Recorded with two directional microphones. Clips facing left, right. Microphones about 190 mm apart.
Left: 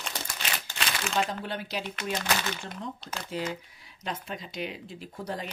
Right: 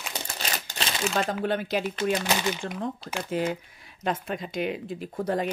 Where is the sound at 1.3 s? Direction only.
50° right (ahead or behind).